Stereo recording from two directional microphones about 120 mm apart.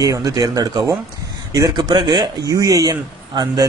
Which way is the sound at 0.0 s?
30° right (ahead or behind).